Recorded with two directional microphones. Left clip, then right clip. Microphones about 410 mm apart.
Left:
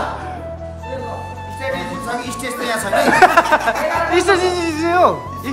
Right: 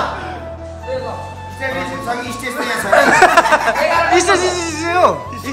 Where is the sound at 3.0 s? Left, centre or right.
Centre.